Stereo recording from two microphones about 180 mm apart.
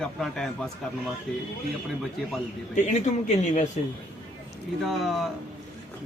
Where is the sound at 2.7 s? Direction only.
40° left (ahead or behind).